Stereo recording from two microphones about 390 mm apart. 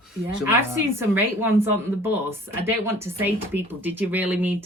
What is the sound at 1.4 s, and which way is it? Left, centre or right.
A woman's voice, centre.